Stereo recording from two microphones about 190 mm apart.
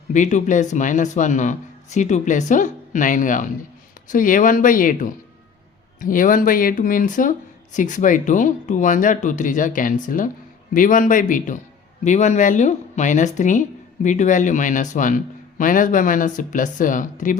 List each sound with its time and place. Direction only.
0.1 s speech: 40° left (ahead or behind)